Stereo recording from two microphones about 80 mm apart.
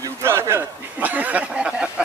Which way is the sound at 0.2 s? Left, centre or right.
Right.